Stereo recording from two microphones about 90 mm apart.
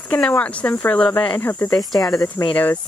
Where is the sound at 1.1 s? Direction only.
55° left (ahead or behind).